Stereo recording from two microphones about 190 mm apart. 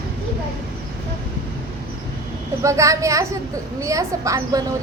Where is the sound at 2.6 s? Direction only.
15° right (ahead or behind).